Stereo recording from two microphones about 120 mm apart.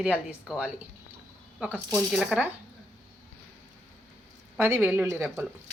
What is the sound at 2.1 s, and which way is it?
Speech, centre (ahead or behind).